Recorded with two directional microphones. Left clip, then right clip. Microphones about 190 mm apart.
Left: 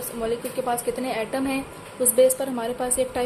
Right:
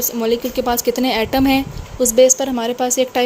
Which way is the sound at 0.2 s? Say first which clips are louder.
Right 8 dB; 55° right (ahead or behind).